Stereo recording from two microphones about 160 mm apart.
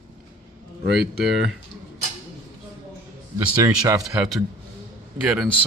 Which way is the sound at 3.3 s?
20° right (ahead or behind).